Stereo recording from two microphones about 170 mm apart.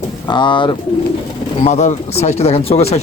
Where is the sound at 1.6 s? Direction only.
40° left (ahead or behind).